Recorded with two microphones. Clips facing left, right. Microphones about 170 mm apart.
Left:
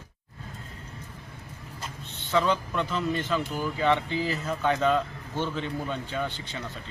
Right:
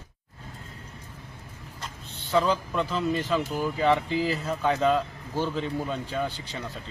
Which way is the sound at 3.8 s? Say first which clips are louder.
Right 2 dB; 35° right (ahead or behind).